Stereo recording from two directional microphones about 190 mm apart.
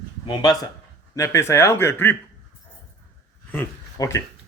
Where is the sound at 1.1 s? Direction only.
15° left (ahead or behind).